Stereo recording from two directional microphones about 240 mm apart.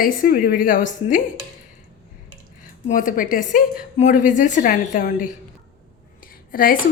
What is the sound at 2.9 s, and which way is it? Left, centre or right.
A woman's voice, left.